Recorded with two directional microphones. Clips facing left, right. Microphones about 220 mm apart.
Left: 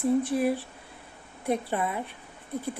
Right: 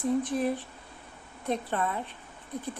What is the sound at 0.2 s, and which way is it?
A woman's voice, 10° left (ahead or behind).